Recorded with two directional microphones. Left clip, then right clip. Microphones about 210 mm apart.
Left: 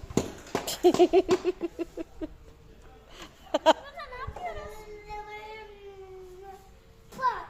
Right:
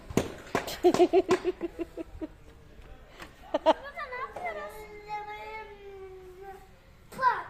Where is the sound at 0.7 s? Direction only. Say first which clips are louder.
Left 2 dB; 10° left (ahead or behind).